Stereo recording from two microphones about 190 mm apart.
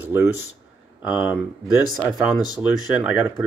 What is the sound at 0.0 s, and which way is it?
Speech, 10° right (ahead or behind).